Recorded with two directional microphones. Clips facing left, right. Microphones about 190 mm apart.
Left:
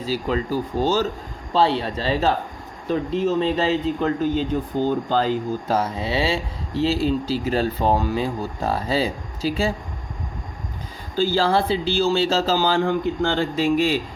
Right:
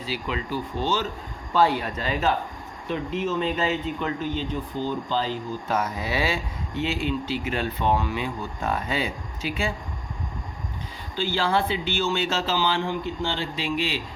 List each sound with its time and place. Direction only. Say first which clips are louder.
0.0 s speech: left 7 dB; 40° left (ahead or behind)
1.5 s speech: left 2 dB; 30° left (ahead or behind); by 5.7 s 45° left (ahead or behind)
5.7 s speech: left 3 dB; 30° left (ahead or behind)
11.1 s speech: left 5 dB; 40° left (ahead or behind)